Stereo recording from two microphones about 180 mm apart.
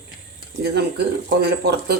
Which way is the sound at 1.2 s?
65° right (ahead or behind).